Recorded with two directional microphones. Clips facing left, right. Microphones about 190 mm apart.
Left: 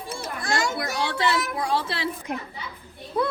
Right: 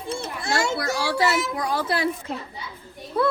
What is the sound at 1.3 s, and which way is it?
Speech, 25° right (ahead or behind).